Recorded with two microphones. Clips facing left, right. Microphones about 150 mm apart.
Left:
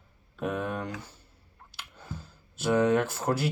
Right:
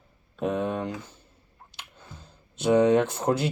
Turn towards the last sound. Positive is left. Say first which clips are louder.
# right 4 dB
turn(degrees=-20)  # may be behind; listen again after turning